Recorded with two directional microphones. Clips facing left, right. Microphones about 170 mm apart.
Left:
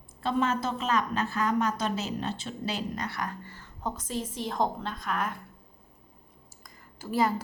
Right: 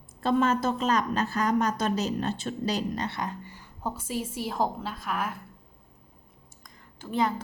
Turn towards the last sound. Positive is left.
turn(degrees=5)  # may be behind; listen again after turning